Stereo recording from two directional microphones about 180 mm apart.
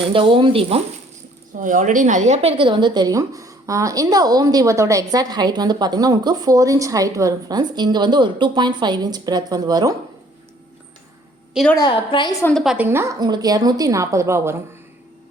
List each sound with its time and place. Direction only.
0.1 s a woman's voice: 30° right (ahead or behind)
1.5 s a woman's voice: 45° right (ahead or behind); by 9.9 s 20° right (ahead or behind)
11.5 s a woman's voice: 5° left (ahead or behind)
11.8 s a woman's voice: 25° left (ahead or behind)
12.4 s a woman's voice: 10° left (ahead or behind)
12.6 s a woman's voice: 10° right (ahead or behind)